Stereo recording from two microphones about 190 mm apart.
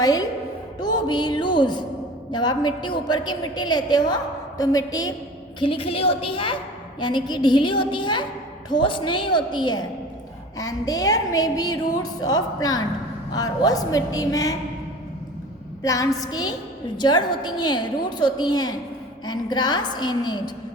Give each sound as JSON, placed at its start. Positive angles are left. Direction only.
{"t": 0.0, "sound": "a woman's voice", "side_deg": 20}
{"t": 15.8, "sound": "a woman's voice", "side_deg": 20}